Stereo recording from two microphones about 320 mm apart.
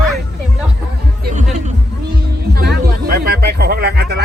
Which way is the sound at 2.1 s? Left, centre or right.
Right.